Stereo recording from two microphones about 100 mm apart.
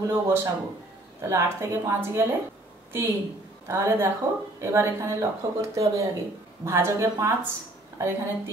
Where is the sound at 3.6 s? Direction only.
25° right (ahead or behind).